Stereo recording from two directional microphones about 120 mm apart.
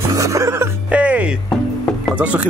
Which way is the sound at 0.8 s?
10° right (ahead or behind).